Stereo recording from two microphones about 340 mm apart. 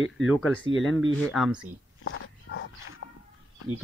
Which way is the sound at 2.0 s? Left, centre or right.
Left.